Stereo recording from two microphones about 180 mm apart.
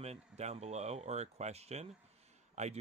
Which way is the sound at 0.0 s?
35° right (ahead or behind).